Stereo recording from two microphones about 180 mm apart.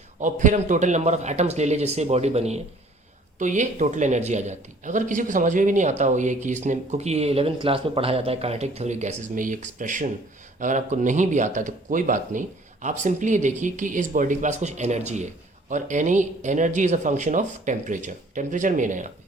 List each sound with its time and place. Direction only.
0.2 s speech: 45° right (ahead or behind)